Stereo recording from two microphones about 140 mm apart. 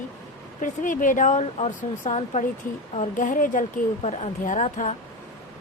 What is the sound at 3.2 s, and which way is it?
Speech, 75° left (ahead or behind).